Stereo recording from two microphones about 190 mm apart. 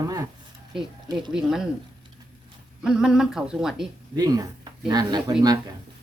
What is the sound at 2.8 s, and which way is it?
A woman's voice, 5° right (ahead or behind).